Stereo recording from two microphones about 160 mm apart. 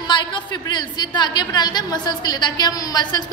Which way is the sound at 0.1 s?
30° left (ahead or behind).